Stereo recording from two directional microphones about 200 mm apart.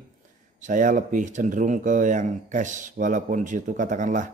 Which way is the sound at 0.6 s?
40° right (ahead or behind).